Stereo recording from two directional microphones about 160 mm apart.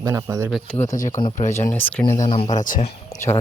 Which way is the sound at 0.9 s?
55° left (ahead or behind).